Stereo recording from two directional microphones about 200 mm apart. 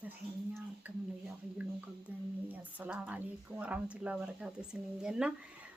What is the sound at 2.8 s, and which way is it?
Speech, 5° right (ahead or behind).